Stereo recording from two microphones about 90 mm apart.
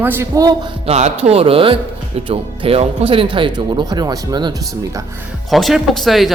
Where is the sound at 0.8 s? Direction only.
90° right; by 4.5 s 55° right (ahead or behind).